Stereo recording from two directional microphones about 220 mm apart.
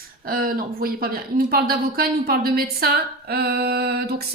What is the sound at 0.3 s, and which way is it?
Speech, 40° right (ahead or behind).